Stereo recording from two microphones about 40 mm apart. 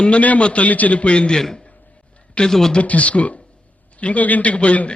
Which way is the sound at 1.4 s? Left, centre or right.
Centre.